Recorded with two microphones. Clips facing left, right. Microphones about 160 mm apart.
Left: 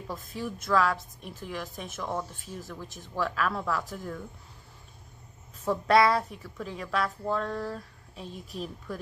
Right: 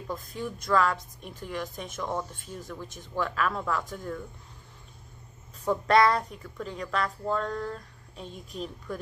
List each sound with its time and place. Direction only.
0.0 s a woman's voice: centre (ahead or behind)
5.7 s a woman's voice: 5° left (ahead or behind)